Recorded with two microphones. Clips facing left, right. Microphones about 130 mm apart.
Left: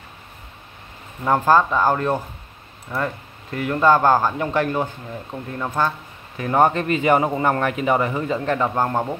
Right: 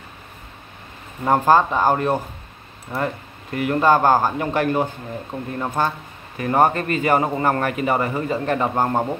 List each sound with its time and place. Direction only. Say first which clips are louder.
1.2 s speech: right 1 dB; 15° right (ahead or behind)
3.5 s speech: even; 10° right (ahead or behind)
6.3 s speech: even; 5° right (ahead or behind)
8.5 s speech: right 1 dB; 10° right (ahead or behind)